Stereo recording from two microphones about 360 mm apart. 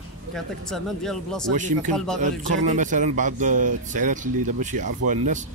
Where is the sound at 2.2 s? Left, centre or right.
Centre.